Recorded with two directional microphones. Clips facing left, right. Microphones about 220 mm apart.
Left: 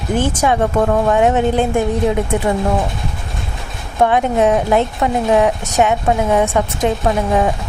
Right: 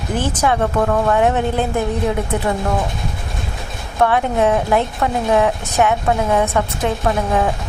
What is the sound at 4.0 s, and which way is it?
A woman's voice, 20° left (ahead or behind).